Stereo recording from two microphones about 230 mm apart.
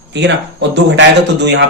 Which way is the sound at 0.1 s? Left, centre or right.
Right.